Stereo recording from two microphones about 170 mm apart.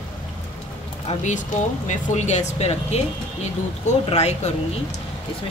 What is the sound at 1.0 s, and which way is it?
Speech, 45° left (ahead or behind).